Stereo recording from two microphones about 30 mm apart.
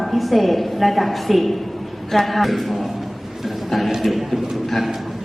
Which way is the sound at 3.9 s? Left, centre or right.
Centre.